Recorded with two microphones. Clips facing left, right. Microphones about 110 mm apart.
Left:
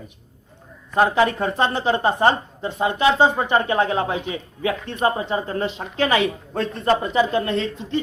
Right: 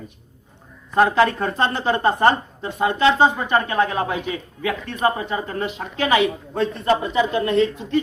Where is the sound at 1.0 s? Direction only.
20° left (ahead or behind).